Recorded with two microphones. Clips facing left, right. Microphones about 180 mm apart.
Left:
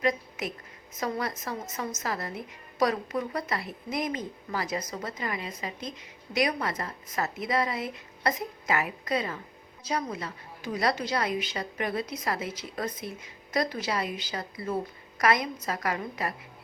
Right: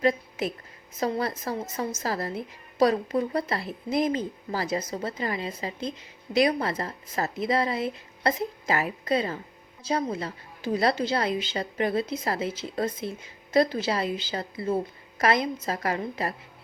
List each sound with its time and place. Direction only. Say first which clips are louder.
0.0 s a woman's voice: right 4 dB; 30° right (ahead or behind)